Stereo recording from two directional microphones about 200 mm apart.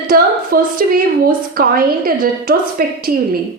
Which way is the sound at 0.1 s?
45° right (ahead or behind).